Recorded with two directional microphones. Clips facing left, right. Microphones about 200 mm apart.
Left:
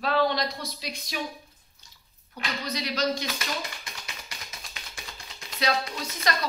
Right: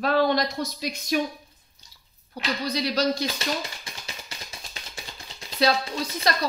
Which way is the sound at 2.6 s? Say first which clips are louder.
Right 4 dB; 35° right (ahead or behind).